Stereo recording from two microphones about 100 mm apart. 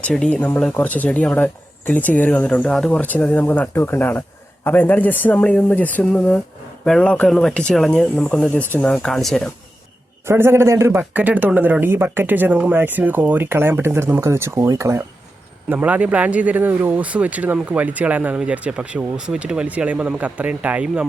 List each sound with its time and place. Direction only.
0.1 s speech: 10° left (ahead or behind)
3.0 s speech: 15° left (ahead or behind)
10.2 s speech: 25° right (ahead or behind)
15.7 s speech: 15° right (ahead or behind)